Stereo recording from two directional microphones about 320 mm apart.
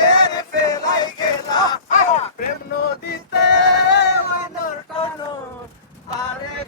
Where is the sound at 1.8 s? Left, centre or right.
Left.